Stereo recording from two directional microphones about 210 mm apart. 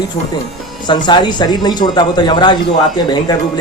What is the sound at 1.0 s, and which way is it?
A man's voice, 20° left (ahead or behind).